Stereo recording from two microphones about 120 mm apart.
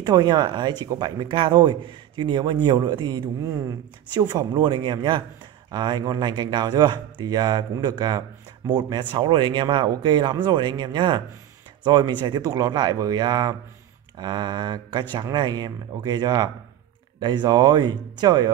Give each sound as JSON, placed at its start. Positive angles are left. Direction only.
{"t": 0.0, "sound": "speech", "side_deg": -35}